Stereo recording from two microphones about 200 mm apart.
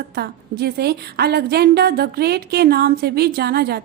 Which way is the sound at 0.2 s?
55° right (ahead or behind).